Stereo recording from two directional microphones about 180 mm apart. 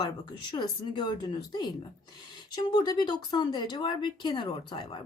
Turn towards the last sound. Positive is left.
turn(degrees=25)  # may be behind; listen again after turning